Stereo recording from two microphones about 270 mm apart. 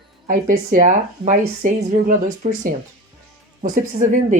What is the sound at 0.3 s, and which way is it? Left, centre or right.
Speech, right.